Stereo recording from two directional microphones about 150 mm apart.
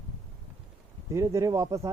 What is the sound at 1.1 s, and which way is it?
Speech, 20° right (ahead or behind).